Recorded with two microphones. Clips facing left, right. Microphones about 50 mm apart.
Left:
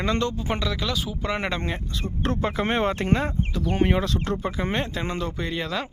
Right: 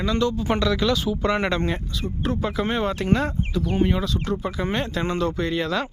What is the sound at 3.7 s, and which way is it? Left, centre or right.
Speech, left.